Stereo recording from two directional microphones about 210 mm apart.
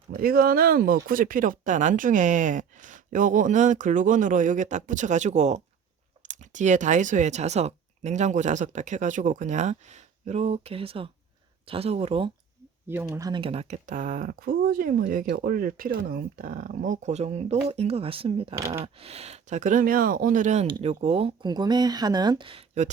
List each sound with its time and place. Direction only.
0.1 s speech: 45° right (ahead or behind); by 12.3 s 25° right (ahead or behind)
12.9 s speech: 10° right (ahead or behind); by 20.7 s 35° right (ahead or behind)
20.7 s speech: 20° right (ahead or behind)